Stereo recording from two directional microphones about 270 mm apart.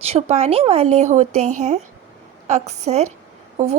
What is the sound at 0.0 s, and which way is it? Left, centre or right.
A woman's voice, right.